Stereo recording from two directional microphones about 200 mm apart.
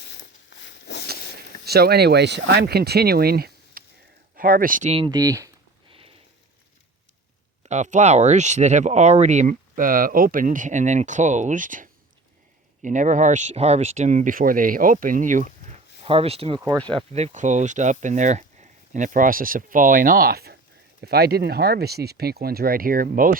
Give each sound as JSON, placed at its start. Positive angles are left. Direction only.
{"t": 0.6, "sound": "a sound", "side_deg": 60}
{"t": 1.6, "sound": "speech", "side_deg": -55}
{"t": 7.6, "sound": "speech", "side_deg": -35}
{"t": 16.0, "sound": "speech", "side_deg": -30}